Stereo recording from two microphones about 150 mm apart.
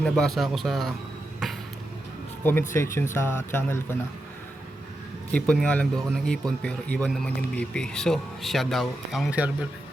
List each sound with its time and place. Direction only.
0.0 s speech: centre (ahead or behind)
2.4 s speech: 15° left (ahead or behind)
5.3 s speech: 5° left (ahead or behind); by 9.6 s 10° right (ahead or behind)